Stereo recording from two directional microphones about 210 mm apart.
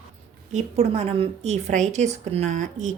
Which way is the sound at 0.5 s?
30° right (ahead or behind).